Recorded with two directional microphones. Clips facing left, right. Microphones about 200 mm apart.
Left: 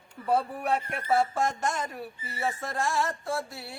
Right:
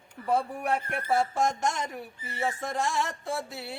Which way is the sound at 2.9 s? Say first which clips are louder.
Left 1 dB; 20° right (ahead or behind).